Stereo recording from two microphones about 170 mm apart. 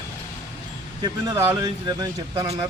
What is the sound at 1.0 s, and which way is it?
Speech, 20° right (ahead or behind).